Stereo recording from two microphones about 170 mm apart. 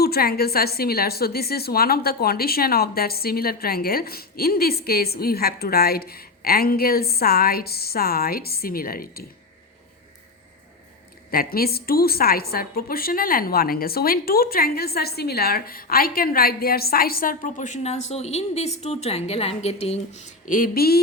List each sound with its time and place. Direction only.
0.0 s a woman's voice: 65° left (ahead or behind)
11.3 s a woman's voice: 60° left (ahead or behind)